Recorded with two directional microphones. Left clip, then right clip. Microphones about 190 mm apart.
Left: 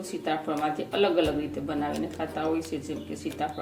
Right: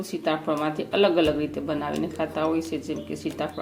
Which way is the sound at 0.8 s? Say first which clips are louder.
Right 4 dB; 45° right (ahead or behind).